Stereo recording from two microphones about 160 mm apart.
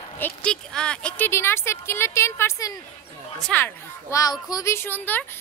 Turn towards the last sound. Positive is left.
turn(degrees=10)  # may be behind; listen again after turning